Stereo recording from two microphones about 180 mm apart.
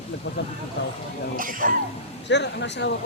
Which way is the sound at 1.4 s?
50° right (ahead or behind).